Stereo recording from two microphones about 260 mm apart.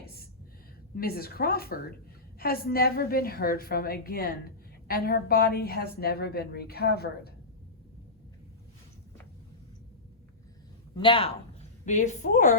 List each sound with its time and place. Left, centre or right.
0.0 s a sound: left
0.9 s a woman's voice: left
10.9 s a woman's voice: centre